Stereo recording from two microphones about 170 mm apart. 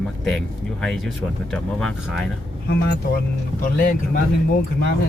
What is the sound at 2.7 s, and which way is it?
Speech, 70° left (ahead or behind).